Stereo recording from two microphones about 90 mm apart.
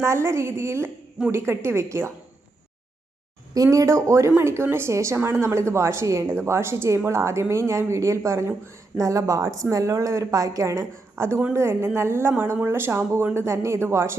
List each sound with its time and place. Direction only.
0.0 s a woman's voice: 30° right (ahead or behind)
3.5 s a woman's voice: 40° right (ahead or behind)